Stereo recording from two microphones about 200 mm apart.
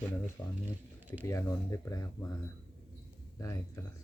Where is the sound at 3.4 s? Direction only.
15° left (ahead or behind).